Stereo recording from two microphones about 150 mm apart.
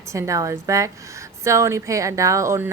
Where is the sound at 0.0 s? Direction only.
20° right (ahead or behind).